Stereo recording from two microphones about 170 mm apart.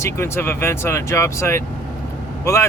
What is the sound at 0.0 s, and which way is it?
Speech, 15° left (ahead or behind).